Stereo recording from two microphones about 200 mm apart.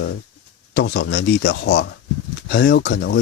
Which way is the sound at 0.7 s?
55° left (ahead or behind).